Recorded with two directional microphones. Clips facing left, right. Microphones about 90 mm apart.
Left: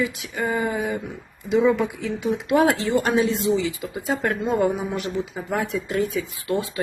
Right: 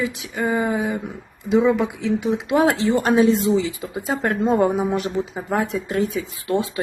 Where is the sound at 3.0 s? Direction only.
35° right (ahead or behind).